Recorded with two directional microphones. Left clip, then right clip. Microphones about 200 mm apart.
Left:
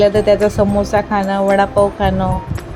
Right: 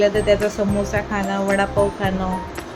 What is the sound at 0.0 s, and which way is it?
Speech, 20° left (ahead or behind).